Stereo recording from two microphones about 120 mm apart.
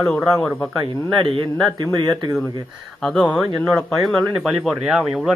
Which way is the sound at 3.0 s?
Centre (ahead or behind).